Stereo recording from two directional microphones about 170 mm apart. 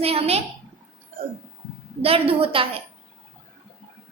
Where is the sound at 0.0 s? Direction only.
35° right (ahead or behind).